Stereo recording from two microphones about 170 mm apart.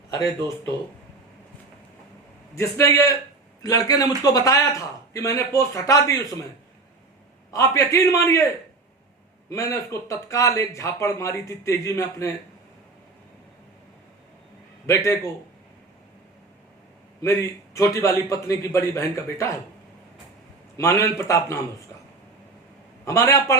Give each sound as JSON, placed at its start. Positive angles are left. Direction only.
{"t": 0.1, "sound": "a man's voice", "side_deg": 20}
{"t": 2.6, "sound": "a man's voice", "side_deg": 15}
{"t": 7.5, "sound": "speech", "side_deg": 20}
{"t": 9.5, "sound": "speech", "side_deg": 20}
{"t": 14.8, "sound": "a man's voice", "side_deg": 20}
{"t": 17.2, "sound": "speech", "side_deg": 20}
{"t": 20.7, "sound": "speech", "side_deg": 20}
{"t": 23.0, "sound": "speech", "side_deg": 15}